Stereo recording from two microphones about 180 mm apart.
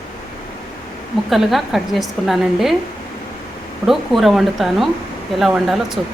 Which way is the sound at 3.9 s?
Centre (ahead or behind).